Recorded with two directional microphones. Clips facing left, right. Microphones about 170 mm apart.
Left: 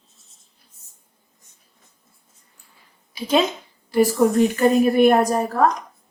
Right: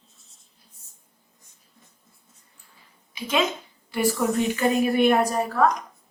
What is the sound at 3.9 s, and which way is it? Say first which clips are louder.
A woman's voice: left 6 dB; 40° left (ahead or behind).